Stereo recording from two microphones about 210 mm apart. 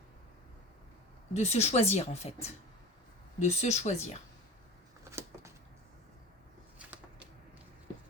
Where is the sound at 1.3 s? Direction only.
30° left (ahead or behind).